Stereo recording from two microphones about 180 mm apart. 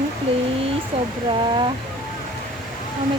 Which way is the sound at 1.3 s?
25° right (ahead or behind).